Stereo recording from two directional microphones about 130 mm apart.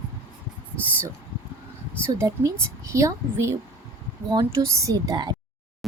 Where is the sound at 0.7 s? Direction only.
10° left (ahead or behind).